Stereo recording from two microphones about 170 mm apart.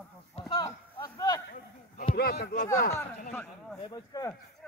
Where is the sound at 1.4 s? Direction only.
55° left (ahead or behind).